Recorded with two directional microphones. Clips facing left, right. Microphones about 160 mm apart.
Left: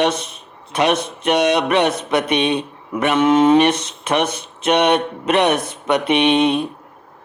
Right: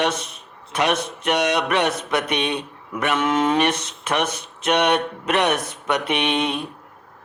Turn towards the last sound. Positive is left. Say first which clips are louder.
# left 7 dB
turn(degrees=25)  # may be behind; listen again after turning